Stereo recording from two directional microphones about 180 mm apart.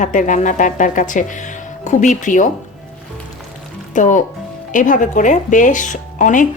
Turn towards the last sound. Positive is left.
turn(degrees=45)  # may be behind; listen again after turning